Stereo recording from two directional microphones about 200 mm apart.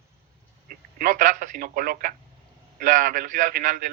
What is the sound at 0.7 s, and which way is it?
A man's voice, 45° right (ahead or behind).